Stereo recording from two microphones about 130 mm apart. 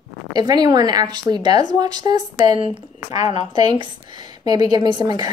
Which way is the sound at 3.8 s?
35° right (ahead or behind).